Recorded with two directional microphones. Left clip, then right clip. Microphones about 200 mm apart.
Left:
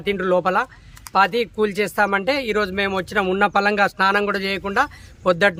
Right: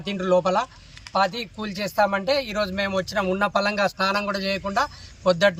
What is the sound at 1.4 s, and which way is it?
A man's voice, 10° left (ahead or behind).